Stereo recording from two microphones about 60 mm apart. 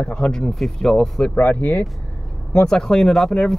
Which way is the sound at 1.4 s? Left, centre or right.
Left.